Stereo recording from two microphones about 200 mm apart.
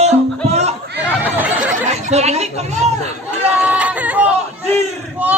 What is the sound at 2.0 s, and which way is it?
Speech, 35° right (ahead or behind).